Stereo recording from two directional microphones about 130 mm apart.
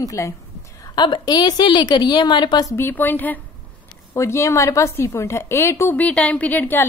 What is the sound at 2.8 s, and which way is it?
A woman's voice, 15° left (ahead or behind).